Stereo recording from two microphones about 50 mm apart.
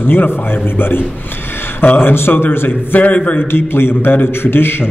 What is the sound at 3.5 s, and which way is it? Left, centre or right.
A man's voice, left.